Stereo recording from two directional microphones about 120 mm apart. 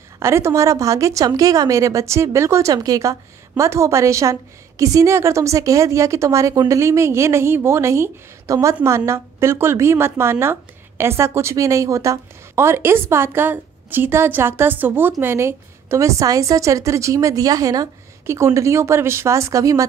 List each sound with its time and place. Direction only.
0.2 s a woman's voice: 20° right (ahead or behind)